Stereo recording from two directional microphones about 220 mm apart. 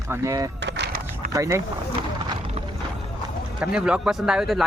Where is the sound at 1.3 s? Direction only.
15° right (ahead or behind).